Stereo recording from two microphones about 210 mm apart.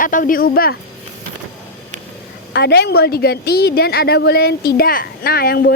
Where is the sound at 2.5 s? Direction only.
50° left (ahead or behind).